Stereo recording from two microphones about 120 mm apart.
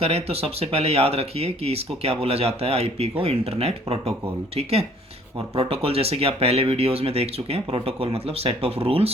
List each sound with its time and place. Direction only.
0.0 s speech: 55° right (ahead or behind)